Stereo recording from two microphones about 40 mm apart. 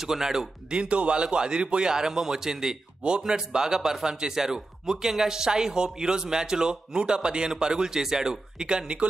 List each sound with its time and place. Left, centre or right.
0.0 s speech: centre
0.7 s a man's voice: right